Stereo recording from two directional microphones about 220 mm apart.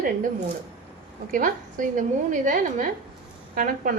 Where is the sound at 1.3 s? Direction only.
40° right (ahead or behind).